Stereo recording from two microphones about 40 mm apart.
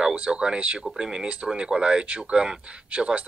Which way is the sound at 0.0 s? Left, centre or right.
Right.